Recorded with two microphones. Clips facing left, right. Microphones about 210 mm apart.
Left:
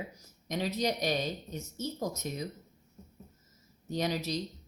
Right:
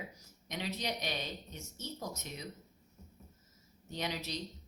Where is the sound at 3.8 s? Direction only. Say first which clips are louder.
Left 7 dB; 40° left (ahead or behind).